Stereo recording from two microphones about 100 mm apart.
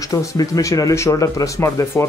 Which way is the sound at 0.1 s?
30° left (ahead or behind).